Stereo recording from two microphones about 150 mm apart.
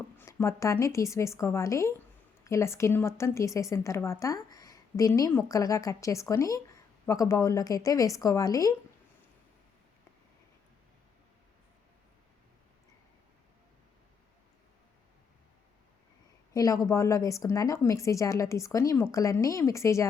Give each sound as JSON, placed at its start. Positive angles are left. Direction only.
{"t": 0.2, "sound": "a woman's voice", "side_deg": 20}
{"t": 16.6, "sound": "a woman's voice", "side_deg": 25}